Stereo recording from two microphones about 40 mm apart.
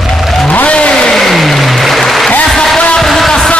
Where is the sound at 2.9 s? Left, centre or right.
Centre.